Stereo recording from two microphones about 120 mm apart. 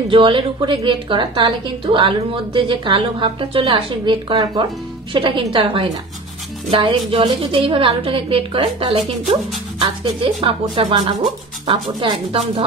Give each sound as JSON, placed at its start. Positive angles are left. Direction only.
{"t": 0.1, "sound": "a woman's voice", "side_deg": -45}
{"t": 5.1, "sound": "a woman's voice", "side_deg": -45}
{"t": 9.8, "sound": "a woman's voice", "side_deg": -45}